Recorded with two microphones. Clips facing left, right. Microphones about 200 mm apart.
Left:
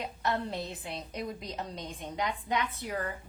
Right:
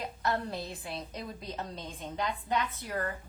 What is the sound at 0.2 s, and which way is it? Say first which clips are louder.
A woman's voice: even; 20° left (ahead or behind).